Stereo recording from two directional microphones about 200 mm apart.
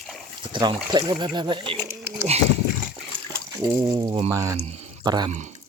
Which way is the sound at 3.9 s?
20° right (ahead or behind).